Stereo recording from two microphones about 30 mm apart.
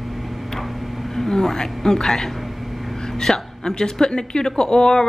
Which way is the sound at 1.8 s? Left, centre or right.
Centre.